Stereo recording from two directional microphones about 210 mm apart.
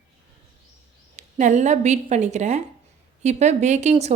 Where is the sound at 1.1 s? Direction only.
35° right (ahead or behind).